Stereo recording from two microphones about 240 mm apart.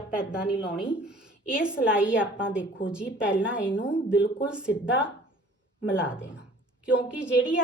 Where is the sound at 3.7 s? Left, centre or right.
Left.